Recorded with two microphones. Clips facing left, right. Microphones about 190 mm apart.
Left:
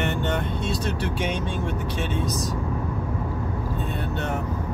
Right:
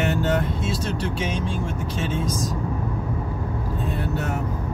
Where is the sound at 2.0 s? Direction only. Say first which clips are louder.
Right 2 dB; centre (ahead or behind).